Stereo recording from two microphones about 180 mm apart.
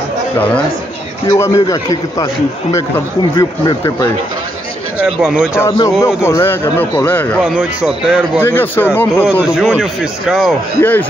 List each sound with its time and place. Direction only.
1.3 s a man's voice: 15° left (ahead or behind)
3.3 s a man's voice: 20° left (ahead or behind)
5.2 s speech: 5° right (ahead or behind)
5.5 s speech: 20° left (ahead or behind)
7.4 s speech: 5° right (ahead or behind)
8.4 s speech: 10° left (ahead or behind)
9.2 s speech: 5° right (ahead or behind)
10.8 s speech: 10° left (ahead or behind)